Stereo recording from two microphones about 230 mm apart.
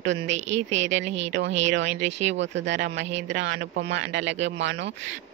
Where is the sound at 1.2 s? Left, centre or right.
Right.